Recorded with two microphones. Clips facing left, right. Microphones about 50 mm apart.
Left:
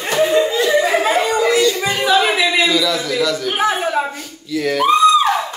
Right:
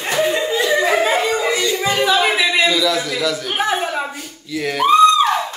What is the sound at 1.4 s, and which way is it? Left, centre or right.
Music, centre.